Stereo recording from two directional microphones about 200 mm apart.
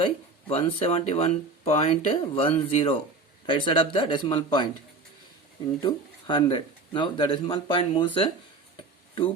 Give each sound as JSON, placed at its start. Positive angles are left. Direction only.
{"t": 0.0, "sound": "speech", "side_deg": 25}
{"t": 5.8, "sound": "speech", "side_deg": 25}